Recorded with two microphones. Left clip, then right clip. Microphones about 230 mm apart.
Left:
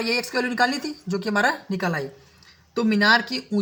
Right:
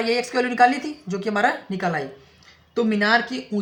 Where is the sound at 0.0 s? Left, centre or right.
Left.